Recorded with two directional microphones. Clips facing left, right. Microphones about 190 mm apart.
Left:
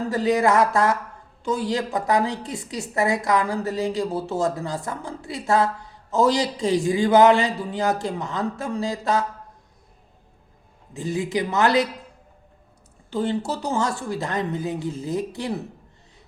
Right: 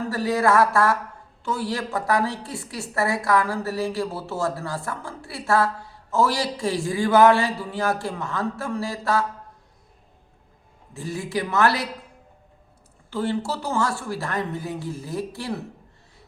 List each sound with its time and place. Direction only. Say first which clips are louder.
0.1 s a woman's voice: left 2 dB; 20° left (ahead or behind)
10.9 s a woman's voice: left 3 dB; 20° left (ahead or behind)
13.1 s a woman's voice: left 1 dB; 20° left (ahead or behind)